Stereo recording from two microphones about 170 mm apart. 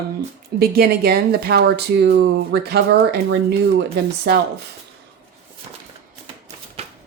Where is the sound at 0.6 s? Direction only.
65° right (ahead or behind).